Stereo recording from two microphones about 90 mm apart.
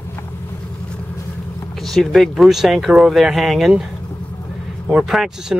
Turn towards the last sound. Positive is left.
turn(degrees=-5)  # may be behind; listen again after turning